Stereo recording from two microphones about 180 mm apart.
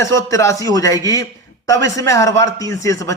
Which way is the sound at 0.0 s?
15° left (ahead or behind).